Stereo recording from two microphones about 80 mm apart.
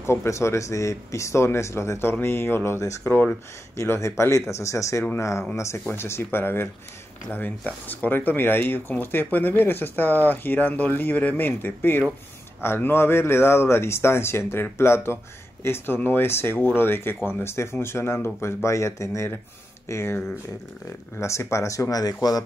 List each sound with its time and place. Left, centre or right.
0.0 s speech: left